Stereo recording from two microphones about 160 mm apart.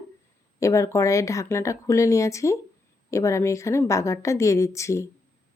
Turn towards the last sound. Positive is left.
turn(degrees=20)  # may be behind; listen again after turning